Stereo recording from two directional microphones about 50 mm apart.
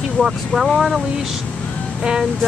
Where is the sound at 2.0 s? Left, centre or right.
Centre.